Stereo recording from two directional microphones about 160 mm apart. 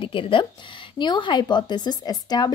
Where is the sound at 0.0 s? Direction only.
30° left (ahead or behind).